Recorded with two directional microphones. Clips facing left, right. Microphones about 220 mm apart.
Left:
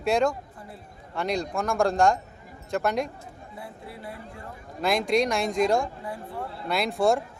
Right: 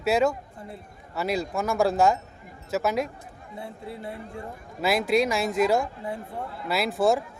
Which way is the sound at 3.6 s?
25° right (ahead or behind).